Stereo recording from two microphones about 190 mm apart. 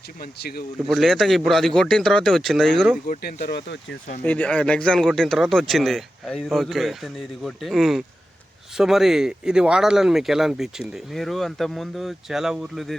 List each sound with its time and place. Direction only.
0.2 s speech: 55° left (ahead or behind)
0.9 s speech: centre (ahead or behind)
3.1 s speech: 55° left (ahead or behind)
4.2 s speech: 5° left (ahead or behind)